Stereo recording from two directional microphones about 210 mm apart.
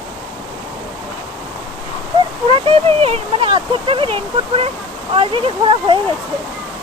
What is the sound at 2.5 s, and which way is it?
Speech, 25° right (ahead or behind).